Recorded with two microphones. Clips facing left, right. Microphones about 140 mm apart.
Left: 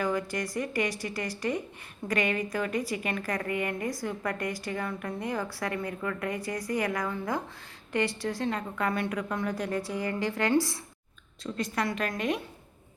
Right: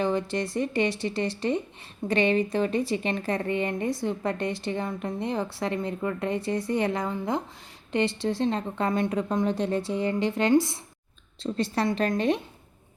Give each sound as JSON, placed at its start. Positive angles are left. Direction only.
{"t": 0.0, "sound": "a woman's voice", "side_deg": -25}